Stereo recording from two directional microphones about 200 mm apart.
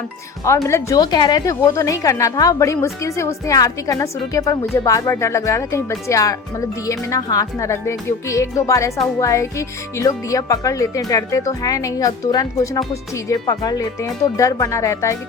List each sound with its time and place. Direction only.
0.4 s a woman's voice: 15° left (ahead or behind)